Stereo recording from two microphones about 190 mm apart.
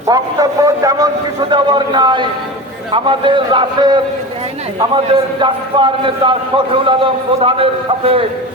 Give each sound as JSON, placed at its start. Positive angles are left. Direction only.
{"t": 0.1, "sound": "a man's voice", "side_deg": -20}
{"t": 5.4, "sound": "a man's voice", "side_deg": -25}